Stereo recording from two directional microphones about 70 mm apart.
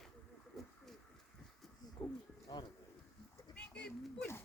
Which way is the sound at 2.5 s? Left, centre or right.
Left.